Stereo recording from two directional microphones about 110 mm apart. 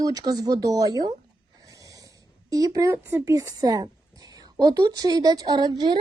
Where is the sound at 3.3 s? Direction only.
35° right (ahead or behind).